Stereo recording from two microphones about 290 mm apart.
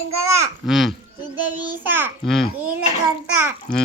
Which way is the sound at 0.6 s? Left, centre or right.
Centre.